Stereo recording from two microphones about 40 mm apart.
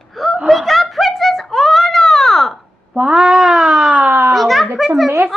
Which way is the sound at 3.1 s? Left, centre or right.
Centre.